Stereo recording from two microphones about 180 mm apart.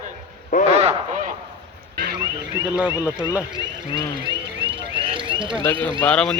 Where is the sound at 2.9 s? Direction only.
20° left (ahead or behind).